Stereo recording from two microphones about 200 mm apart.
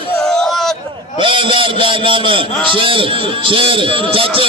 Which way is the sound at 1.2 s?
25° right (ahead or behind).